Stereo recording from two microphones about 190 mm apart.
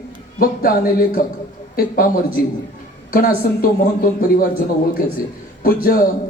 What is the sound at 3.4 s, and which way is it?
Speech, 50° left (ahead or behind).